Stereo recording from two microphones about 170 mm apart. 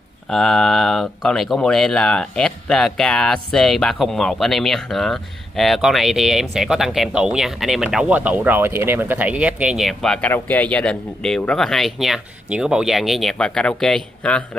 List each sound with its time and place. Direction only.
0.3 s speech: 5° left (ahead or behind)